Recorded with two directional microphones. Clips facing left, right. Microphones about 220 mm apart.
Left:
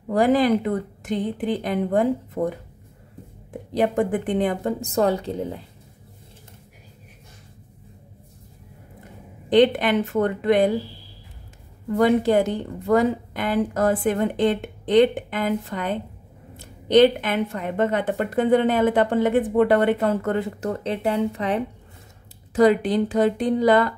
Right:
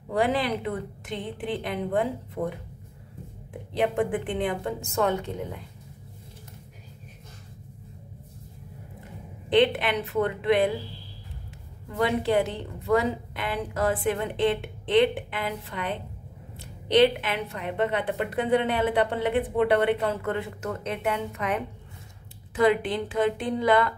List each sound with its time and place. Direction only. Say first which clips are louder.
0.1 s a woman's voice: left 7 dB; 45° left (ahead or behind)
3.7 s a woman's voice: left 4 dB; 40° left (ahead or behind)
9.5 s a woman's voice: left 5 dB; 45° left (ahead or behind)
12.0 s a woman's voice: left 6 dB; 45° left (ahead or behind)